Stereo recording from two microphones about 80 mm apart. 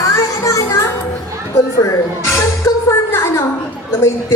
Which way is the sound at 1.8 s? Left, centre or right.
Left.